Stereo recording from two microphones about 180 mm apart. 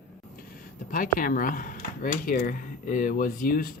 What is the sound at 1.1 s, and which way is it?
Speech, 50° left (ahead or behind).